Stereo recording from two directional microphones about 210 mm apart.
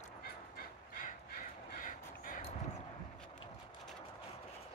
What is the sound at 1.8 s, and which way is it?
Crow, 40° left (ahead or behind).